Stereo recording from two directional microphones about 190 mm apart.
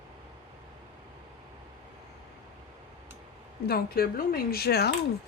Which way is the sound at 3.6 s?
55° left (ahead or behind).